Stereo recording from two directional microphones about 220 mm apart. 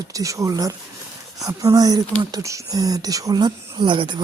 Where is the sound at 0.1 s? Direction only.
15° right (ahead or behind).